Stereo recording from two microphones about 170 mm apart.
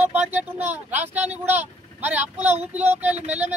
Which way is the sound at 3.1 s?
40° right (ahead or behind).